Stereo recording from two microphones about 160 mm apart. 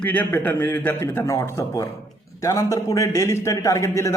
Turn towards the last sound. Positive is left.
turn(degrees=20)  # may be behind; listen again after turning